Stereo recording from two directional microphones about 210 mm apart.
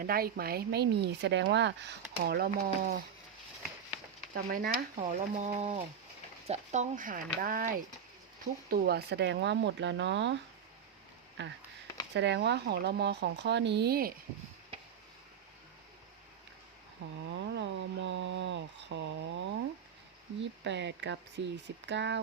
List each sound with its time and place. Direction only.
0.0 s speech: 45° right (ahead or behind)
4.4 s speech: 45° right (ahead or behind)
4.9 s speech: 30° right (ahead or behind); by 10.3 s 55° right (ahead or behind)
11.4 s speech: 55° right (ahead or behind)
17.2 s a sound: 55° right (ahead or behind)
20.4 s speech: 55° right (ahead or behind)